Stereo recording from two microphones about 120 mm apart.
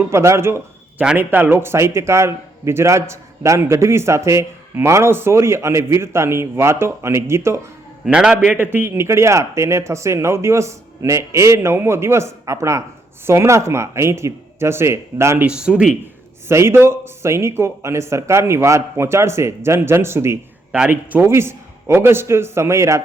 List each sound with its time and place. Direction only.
0.1 s a man's voice: 25° right (ahead or behind)
8.0 s a man's voice: 5° right (ahead or behind); by 15.4 s 25° right (ahead or behind)
15.4 s speech: 5° right (ahead or behind)
16.5 s a man's voice: 20° right (ahead or behind)
20.7 s a man's voice: 10° right (ahead or behind)